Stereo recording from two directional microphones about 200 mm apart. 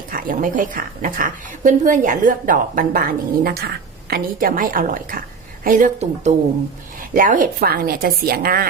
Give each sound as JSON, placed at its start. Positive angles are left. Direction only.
{"t": 0.1, "sound": "a woman's voice", "side_deg": -45}